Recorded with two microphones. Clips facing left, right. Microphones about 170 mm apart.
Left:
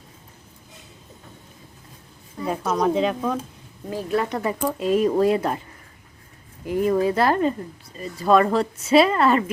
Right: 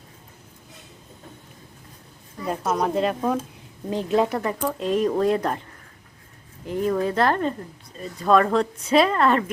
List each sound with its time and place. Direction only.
2.6 s speech: 5° right (ahead or behind)
3.8 s a woman's voice: 20° right (ahead or behind)
4.3 s speech: 5° left (ahead or behind)
6.7 s speech: 10° left (ahead or behind)